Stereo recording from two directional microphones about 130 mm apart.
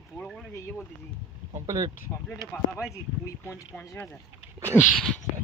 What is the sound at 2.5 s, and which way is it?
Speech, 25° left (ahead or behind).